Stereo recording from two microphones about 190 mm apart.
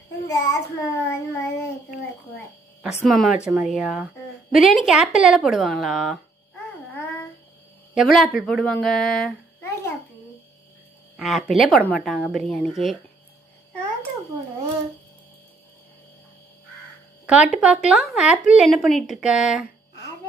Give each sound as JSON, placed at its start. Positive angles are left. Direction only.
{"t": 0.2, "sound": "child singing", "side_deg": 15}
{"t": 2.8, "sound": "speech", "side_deg": 0}
{"t": 6.9, "sound": "child singing", "side_deg": 10}
{"t": 7.9, "sound": "a child's voice", "side_deg": 0}
{"t": 11.1, "sound": "speech", "side_deg": 0}
{"t": 17.3, "sound": "speech", "side_deg": -5}